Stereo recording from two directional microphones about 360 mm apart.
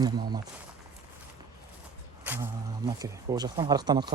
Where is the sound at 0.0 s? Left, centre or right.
Centre.